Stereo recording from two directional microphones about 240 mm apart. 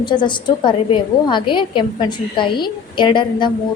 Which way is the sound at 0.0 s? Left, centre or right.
Centre.